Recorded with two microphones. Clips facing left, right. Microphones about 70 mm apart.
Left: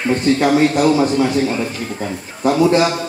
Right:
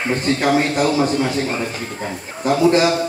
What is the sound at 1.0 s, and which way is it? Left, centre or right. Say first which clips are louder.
Speech: left 3 dB; centre.